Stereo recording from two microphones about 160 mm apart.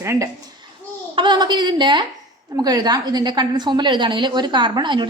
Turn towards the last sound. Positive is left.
turn(degrees=-30)  # may be behind; listen again after turning